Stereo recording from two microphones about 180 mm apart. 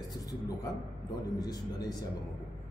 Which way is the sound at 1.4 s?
20° left (ahead or behind).